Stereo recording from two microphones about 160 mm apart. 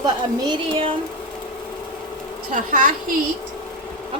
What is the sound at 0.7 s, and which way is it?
Speech, 35° right (ahead or behind).